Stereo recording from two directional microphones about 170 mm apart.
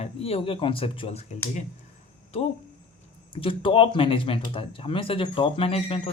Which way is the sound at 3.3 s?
30° left (ahead or behind).